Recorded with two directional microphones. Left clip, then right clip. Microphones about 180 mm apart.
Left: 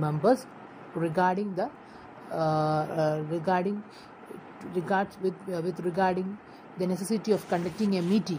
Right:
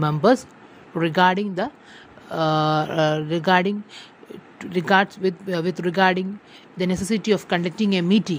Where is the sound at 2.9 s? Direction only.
60° right (ahead or behind).